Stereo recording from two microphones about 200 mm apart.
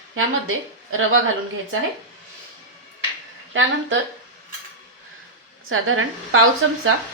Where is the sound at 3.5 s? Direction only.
70° right (ahead or behind).